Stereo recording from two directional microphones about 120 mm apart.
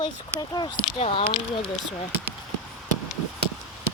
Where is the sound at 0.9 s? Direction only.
50° left (ahead or behind).